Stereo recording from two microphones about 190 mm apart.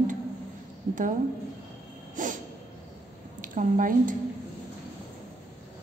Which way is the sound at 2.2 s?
45° right (ahead or behind).